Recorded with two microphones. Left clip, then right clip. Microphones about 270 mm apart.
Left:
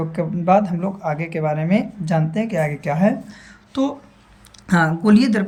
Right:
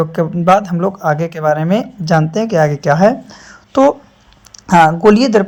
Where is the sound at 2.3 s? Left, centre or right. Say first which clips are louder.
Right 9 dB; right.